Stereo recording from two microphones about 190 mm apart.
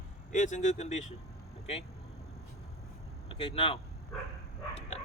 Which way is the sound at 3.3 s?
30° left (ahead or behind).